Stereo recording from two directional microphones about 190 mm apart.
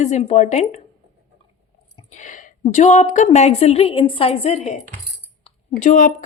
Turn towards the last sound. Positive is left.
turn(degrees=45)  # may be behind; listen again after turning